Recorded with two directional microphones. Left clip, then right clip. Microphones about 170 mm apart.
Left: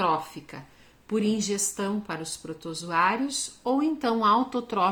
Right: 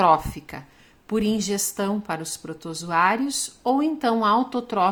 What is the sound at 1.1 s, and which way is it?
A woman's voice, 30° right (ahead or behind).